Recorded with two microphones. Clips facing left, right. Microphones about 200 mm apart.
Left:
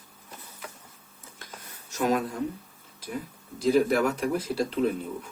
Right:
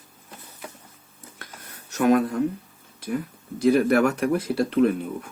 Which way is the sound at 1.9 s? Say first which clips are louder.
Right 6 dB; 60° right (ahead or behind).